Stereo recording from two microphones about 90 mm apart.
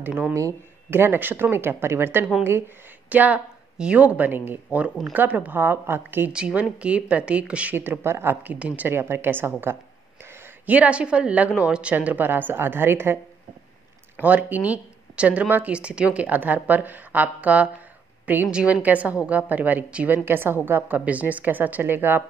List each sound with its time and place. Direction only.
0.0 s speech: 20° right (ahead or behind)
0.3 s a woman's voice: 35° right (ahead or behind)
14.2 s a woman's voice: 15° right (ahead or behind)